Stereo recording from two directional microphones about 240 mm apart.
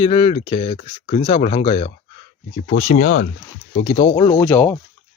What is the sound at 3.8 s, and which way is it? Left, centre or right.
Speech, left.